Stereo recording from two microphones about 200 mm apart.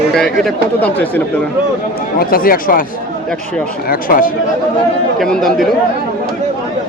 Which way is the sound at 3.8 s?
45° left (ahead or behind).